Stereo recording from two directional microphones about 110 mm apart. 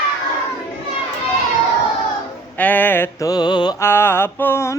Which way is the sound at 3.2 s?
40° left (ahead or behind).